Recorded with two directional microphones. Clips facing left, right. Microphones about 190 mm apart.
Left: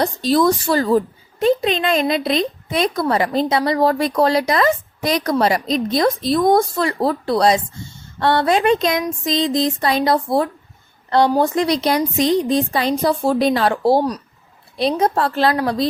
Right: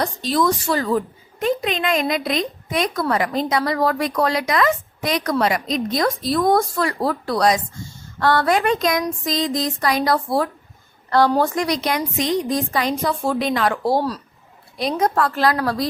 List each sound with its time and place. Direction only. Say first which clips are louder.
0.0 s a woman's voice: left 4 dB; 35° left (ahead or behind); by 15.9 s 20° left (ahead or behind)